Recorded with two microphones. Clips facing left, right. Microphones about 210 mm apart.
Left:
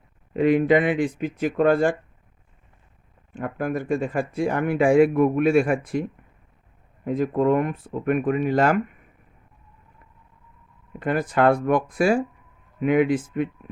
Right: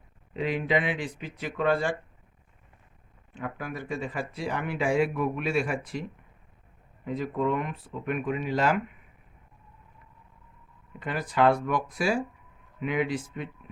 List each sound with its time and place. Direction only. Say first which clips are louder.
0.3 s speech: left 9 dB; 50° left (ahead or behind)
3.3 s speech: left 9 dB; 50° left (ahead or behind)
11.0 s speech: left 4 dB; 50° left (ahead or behind)